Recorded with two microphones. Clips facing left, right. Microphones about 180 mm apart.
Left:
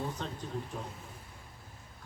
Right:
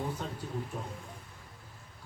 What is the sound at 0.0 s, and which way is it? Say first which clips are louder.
Speech: right 1 dB; 10° right (ahead or behind).